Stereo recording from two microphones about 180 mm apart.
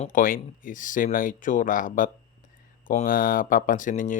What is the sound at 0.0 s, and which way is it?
Speech, 50° left (ahead or behind).